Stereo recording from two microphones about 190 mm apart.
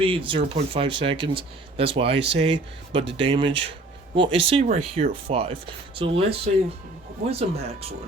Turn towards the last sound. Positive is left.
turn(degrees=-35)  # may be behind; listen again after turning